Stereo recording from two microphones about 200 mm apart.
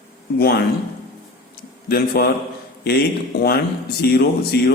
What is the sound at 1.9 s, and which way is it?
Speech, 50° left (ahead or behind).